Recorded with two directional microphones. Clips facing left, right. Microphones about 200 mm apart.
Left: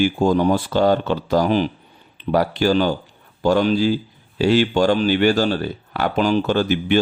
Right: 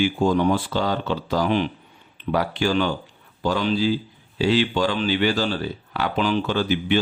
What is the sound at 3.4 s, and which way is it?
Speech, 50° left (ahead or behind).